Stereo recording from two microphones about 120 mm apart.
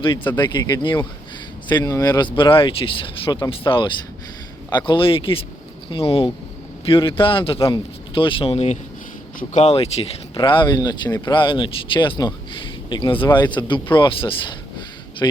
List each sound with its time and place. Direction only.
0.0 s a man's voice: 40° left (ahead or behind)
10.3 s speech: 40° left (ahead or behind)
15.2 s speech: 30° left (ahead or behind)